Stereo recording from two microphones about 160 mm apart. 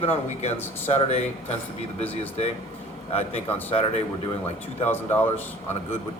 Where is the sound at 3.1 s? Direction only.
40° left (ahead or behind).